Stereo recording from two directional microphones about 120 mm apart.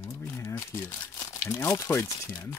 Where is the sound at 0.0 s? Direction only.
20° left (ahead or behind).